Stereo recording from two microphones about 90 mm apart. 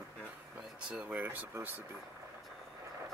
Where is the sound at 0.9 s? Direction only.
10° right (ahead or behind).